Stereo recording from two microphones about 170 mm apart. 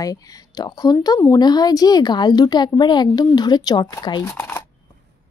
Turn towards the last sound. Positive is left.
turn(degrees=10)  # may be behind; listen again after turning